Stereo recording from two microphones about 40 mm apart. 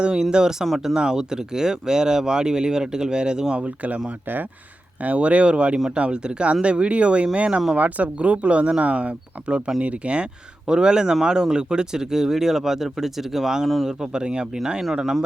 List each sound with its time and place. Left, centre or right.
0.0 s speech: right
3.6 s speech: right
5.0 s speech: right